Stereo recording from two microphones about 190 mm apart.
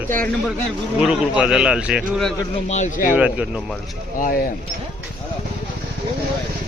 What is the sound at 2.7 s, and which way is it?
Speech, 40° left (ahead or behind).